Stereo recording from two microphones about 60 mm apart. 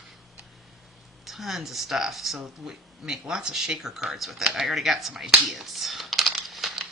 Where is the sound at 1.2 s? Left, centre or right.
Centre.